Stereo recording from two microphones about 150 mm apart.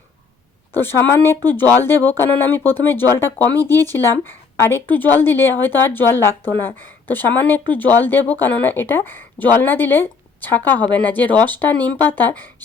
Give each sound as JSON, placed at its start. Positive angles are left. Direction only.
{"t": 0.7, "sound": "a woman's voice", "side_deg": 15}